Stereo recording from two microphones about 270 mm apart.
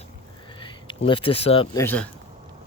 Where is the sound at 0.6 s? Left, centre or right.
Centre.